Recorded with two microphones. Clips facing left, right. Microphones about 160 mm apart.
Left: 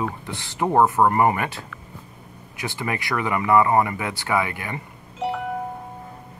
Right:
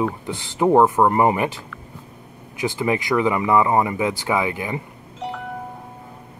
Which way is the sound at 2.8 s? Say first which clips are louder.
Right 6 dB; 20° right (ahead or behind).